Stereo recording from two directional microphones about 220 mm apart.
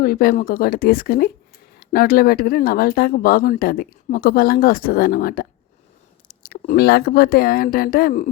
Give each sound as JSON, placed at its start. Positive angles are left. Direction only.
{"t": 0.0, "sound": "speech", "side_deg": 40}